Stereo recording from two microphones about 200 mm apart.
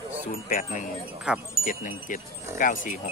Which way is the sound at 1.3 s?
5° right (ahead or behind).